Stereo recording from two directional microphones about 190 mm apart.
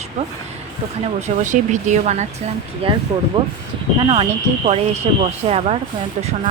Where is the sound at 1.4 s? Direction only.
40° right (ahead or behind).